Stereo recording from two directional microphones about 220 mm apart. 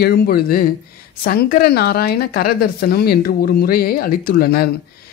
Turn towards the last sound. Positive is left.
turn(degrees=45)  # may be behind; listen again after turning